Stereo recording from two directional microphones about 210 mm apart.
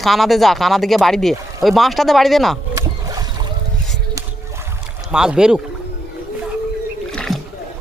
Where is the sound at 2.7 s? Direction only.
15° right (ahead or behind).